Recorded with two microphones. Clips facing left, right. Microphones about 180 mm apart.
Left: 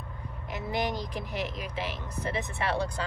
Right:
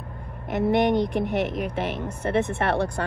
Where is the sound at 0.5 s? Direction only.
60° right (ahead or behind).